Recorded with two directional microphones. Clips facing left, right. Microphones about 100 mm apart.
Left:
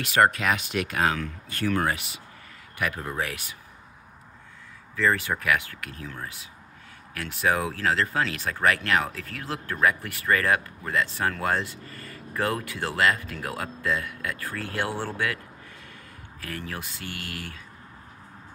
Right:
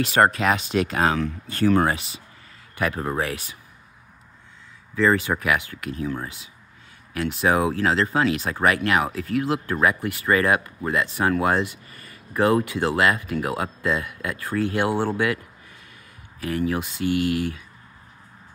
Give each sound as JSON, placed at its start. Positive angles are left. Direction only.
{"t": 0.0, "sound": "speech", "side_deg": -30}
{"t": 4.9, "sound": "speech", "side_deg": -20}